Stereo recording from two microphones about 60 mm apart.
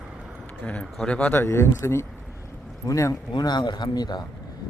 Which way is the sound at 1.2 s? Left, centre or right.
Left.